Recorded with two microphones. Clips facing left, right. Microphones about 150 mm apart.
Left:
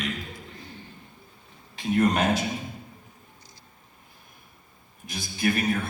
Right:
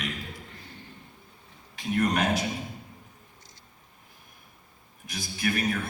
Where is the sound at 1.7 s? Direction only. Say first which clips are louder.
Left 3 dB; 25° left (ahead or behind).